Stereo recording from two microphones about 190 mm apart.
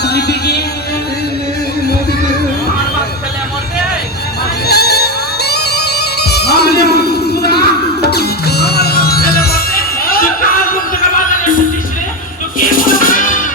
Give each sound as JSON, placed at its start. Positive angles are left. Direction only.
{"t": 0.0, "sound": "music", "side_deg": 60}
{"t": 4.6, "sound": "music", "side_deg": 55}
{"t": 12.8, "sound": "music", "side_deg": 45}